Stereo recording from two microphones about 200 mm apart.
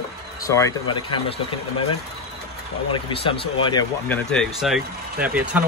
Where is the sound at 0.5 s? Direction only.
15° left (ahead or behind).